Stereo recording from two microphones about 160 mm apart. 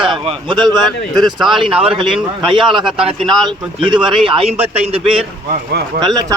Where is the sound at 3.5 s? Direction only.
30° right (ahead or behind).